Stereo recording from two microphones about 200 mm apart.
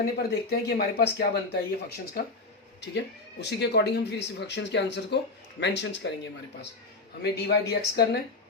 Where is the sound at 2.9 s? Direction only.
60° left (ahead or behind).